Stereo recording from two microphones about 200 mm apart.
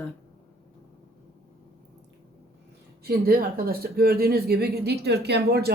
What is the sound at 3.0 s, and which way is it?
A woman's voice, 50° right (ahead or behind).